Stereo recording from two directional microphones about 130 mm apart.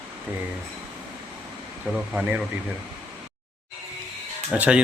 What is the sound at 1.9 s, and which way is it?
Speech, 10° right (ahead or behind).